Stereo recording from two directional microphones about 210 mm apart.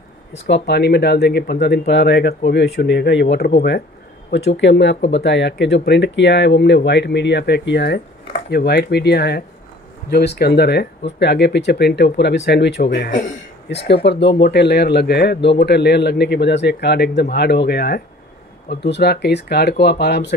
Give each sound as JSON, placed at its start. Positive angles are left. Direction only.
{"t": 0.5, "sound": "speech", "side_deg": 50}